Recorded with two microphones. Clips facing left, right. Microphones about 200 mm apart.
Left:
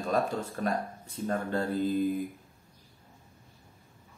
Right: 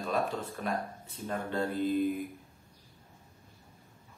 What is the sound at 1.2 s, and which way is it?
Speech, 40° left (ahead or behind).